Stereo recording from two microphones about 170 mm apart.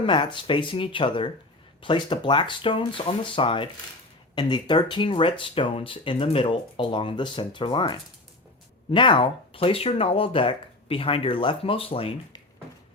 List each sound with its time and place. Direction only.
0.0 s speech: 30° left (ahead or behind)